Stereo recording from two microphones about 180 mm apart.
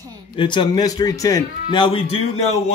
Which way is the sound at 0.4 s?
25° left (ahead or behind).